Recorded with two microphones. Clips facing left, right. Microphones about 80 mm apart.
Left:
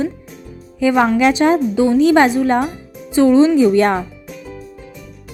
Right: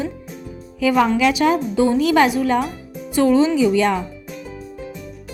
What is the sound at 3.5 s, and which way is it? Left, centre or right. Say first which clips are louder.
Speech: left 4 dB; left.